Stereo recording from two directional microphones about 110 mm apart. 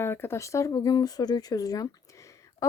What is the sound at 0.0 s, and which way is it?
Speech, 20° left (ahead or behind).